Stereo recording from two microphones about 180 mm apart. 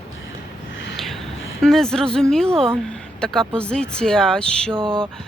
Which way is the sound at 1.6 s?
Centre (ahead or behind).